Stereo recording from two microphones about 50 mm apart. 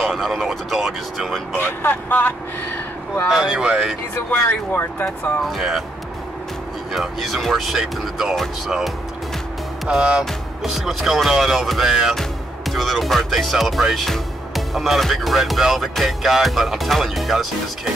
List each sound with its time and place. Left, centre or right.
0.0 s speech: centre
1.6 s speech: left
3.4 s speech: centre
4.3 s speech: left
5.6 s speech: centre
6.9 s speech: centre
10.6 s speech: centre
12.2 s speech: centre